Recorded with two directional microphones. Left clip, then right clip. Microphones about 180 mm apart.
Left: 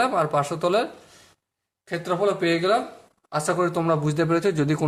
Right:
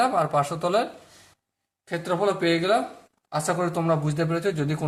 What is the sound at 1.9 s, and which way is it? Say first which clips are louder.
Speech: left 1 dB; centre (ahead or behind).